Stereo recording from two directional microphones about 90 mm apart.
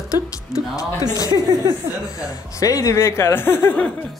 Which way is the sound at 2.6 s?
40° left (ahead or behind).